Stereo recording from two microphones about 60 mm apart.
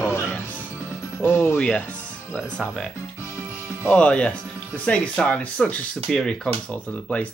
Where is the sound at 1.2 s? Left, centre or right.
Left.